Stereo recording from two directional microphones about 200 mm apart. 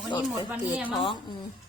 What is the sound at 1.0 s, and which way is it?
Speech, 25° left (ahead or behind).